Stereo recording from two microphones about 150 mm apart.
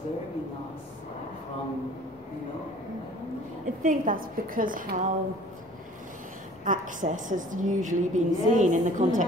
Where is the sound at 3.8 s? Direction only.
65° right (ahead or behind).